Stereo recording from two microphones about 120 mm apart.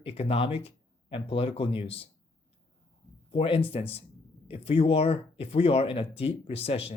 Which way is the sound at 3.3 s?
50° left (ahead or behind).